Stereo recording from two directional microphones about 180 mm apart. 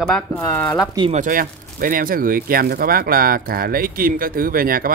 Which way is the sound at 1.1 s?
50° right (ahead or behind).